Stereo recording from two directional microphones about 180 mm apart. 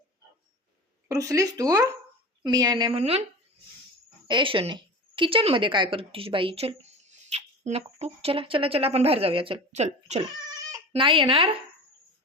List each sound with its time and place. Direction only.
1.0 s a woman's voice: 20° right (ahead or behind)
3.0 s speech: 35° right (ahead or behind)
4.3 s a woman's voice: 25° right (ahead or behind)
7.3 s a sound: 35° right (ahead or behind)
7.9 s speech: 35° right (ahead or behind)
10.2 s speech: 25° right (ahead or behind)